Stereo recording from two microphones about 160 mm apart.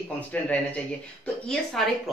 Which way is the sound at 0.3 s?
10° left (ahead or behind).